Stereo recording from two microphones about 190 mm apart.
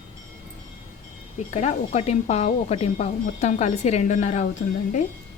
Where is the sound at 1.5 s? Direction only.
35° left (ahead or behind).